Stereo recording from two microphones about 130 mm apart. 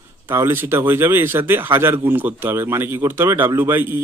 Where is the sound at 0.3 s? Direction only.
20° right (ahead or behind).